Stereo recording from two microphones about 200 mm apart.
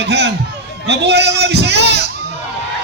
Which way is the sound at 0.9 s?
60° right (ahead or behind).